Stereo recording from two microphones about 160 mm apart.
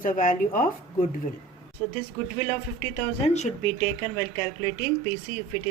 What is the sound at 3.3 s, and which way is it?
Speech, 45° left (ahead or behind).